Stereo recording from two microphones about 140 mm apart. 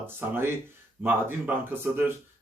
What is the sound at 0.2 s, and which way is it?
Speech, 15° right (ahead or behind).